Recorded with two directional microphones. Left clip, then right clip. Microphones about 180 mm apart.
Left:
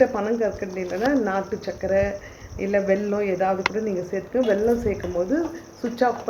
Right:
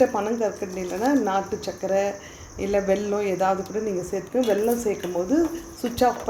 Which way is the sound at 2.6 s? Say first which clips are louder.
Left 1 dB; 15° right (ahead or behind).